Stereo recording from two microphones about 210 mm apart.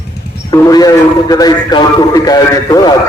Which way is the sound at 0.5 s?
15° left (ahead or behind).